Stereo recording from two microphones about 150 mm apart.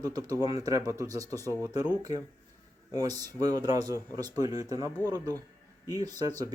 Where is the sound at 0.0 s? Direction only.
25° right (ahead or behind).